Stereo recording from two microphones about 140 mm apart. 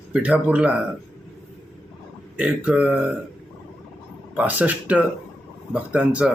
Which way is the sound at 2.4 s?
10° right (ahead or behind).